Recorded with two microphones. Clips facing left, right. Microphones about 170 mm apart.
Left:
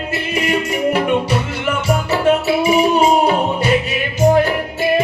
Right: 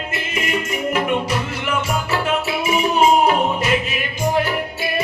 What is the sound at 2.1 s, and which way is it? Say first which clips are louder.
Music: left 8 dB; 30° left (ahead or behind).